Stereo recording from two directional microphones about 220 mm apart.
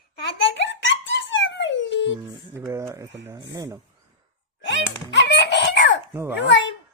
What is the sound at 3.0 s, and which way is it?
Speech, 55° right (ahead or behind).